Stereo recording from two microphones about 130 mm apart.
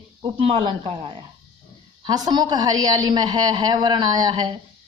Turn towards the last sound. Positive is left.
turn(degrees=-30)  # may be behind; listen again after turning